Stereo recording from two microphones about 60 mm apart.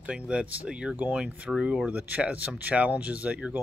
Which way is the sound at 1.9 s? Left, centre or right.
Right.